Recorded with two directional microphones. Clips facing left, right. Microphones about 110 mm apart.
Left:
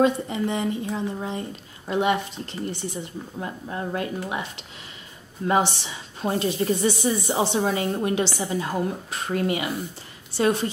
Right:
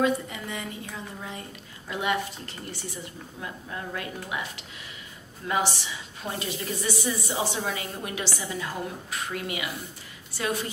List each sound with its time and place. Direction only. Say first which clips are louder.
0.0 s speech: left 5 dB; 30° left (ahead or behind)
5.8 s speech: left 5 dB; 35° left (ahead or behind)